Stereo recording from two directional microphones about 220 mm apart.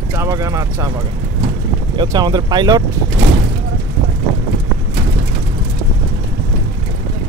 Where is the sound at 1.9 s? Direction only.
20° right (ahead or behind).